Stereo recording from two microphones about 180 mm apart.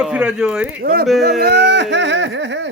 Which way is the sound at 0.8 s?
55° right (ahead or behind).